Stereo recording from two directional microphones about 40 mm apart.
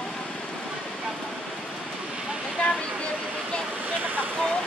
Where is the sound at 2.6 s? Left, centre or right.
Left.